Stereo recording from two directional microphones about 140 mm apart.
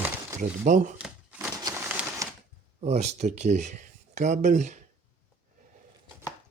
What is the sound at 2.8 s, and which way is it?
Speech, 50° right (ahead or behind).